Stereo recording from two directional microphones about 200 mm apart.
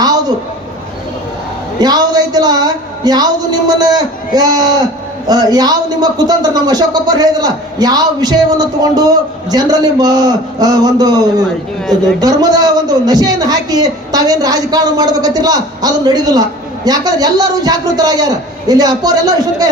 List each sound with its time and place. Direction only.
1.8 s a man's voice: 20° right (ahead or behind)